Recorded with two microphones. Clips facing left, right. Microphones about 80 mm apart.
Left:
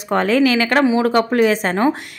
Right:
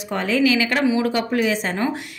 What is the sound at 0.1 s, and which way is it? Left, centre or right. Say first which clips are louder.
A woman's voice: left 4 dB; left.